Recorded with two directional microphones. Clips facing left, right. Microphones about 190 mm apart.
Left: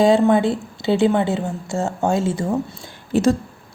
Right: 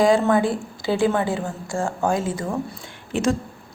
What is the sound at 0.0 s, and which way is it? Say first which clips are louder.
Speech: left 3 dB; 25° left (ahead or behind).